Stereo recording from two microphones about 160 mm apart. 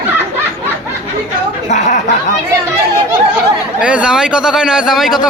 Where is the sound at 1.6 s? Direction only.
45° left (ahead or behind).